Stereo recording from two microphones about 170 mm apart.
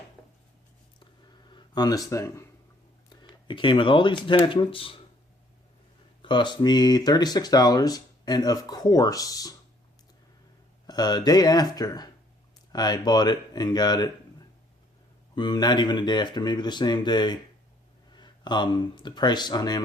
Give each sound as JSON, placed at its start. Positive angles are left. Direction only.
{"t": 1.5, "sound": "speech", "side_deg": 25}
{"t": 3.2, "sound": "speech", "side_deg": 30}
{"t": 6.2, "sound": "speech", "side_deg": 25}
{"t": 10.8, "sound": "speech", "side_deg": 25}
{"t": 15.4, "sound": "speech", "side_deg": 25}